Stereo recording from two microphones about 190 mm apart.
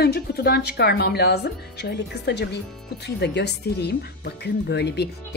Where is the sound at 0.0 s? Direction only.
55° left (ahead or behind).